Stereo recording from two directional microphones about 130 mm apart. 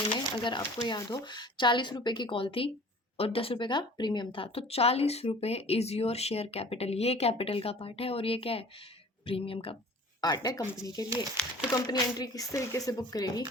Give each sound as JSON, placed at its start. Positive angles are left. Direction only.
{"t": 0.1, "sound": "speech", "side_deg": 35}
{"t": 10.2, "sound": "speech", "side_deg": 30}
{"t": 11.4, "sound": "speech", "side_deg": 5}
{"t": 11.7, "sound": "speech", "side_deg": 30}